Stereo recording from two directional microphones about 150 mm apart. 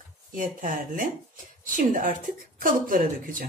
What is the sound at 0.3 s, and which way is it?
Speech, 65° right (ahead or behind).